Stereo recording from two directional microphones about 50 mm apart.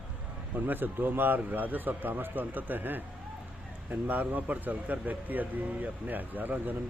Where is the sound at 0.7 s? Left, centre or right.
Right.